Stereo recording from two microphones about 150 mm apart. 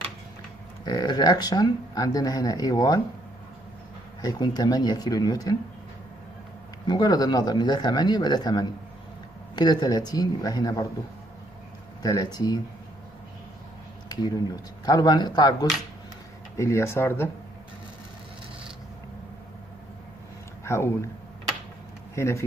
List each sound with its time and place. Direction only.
0.8 s speech: 30° left (ahead or behind)
4.2 s speech: 25° left (ahead or behind)
6.9 s speech: 25° left (ahead or behind)
12.0 s speech: 25° left (ahead or behind)
14.0 s speech: 25° left (ahead or behind)
16.5 s speech: 20° left (ahead or behind)
20.6 s speech: 15° left (ahead or behind)
22.1 s speech: 20° left (ahead or behind)